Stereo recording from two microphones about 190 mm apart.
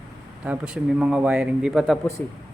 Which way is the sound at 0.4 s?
5° right (ahead or behind).